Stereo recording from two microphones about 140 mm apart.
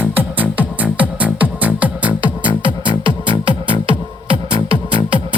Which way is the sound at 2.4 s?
35° right (ahead or behind).